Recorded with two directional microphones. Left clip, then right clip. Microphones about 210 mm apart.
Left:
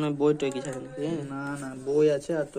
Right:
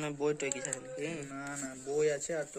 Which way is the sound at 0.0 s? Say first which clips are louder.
Left 9 dB; 10° left (ahead or behind).